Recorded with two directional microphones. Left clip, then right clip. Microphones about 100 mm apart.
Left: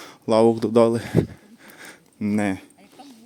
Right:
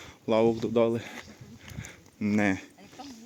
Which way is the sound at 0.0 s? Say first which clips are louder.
Left 7 dB; 70° left (ahead or behind).